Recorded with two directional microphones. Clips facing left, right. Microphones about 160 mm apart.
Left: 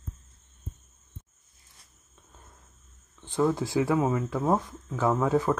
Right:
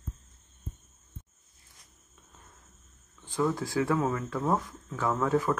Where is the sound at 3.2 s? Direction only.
25° left (ahead or behind).